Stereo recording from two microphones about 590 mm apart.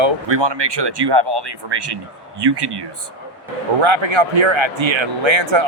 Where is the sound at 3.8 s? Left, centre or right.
Right.